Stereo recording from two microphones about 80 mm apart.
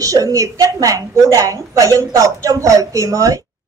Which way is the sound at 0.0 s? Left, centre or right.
Right.